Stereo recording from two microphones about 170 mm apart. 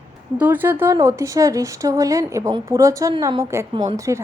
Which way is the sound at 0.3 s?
10° right (ahead or behind).